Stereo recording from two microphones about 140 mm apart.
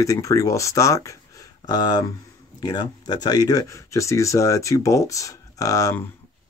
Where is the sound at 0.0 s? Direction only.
25° left (ahead or behind).